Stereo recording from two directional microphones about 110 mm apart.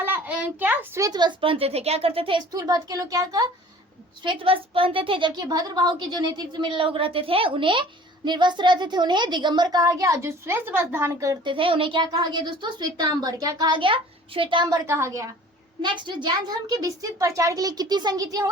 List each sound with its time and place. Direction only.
0.0 s a sound: 15° right (ahead or behind)
1.0 s speech: 40° right (ahead or behind); by 2.4 s 60° right (ahead or behind)
2.5 s a woman's voice: 35° right (ahead or behind)
4.2 s a woman's voice: 50° right (ahead or behind); by 11.3 s 25° right (ahead or behind)
11.4 s a woman's voice: 50° right (ahead or behind)
14.8 s a woman's voice: 25° right (ahead or behind)
15.8 s a woman's voice: 45° right (ahead or behind)